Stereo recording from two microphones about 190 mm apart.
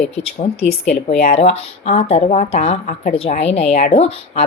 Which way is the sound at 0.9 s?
35° left (ahead or behind).